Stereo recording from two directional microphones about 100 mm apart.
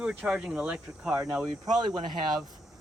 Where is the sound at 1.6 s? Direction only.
40° right (ahead or behind).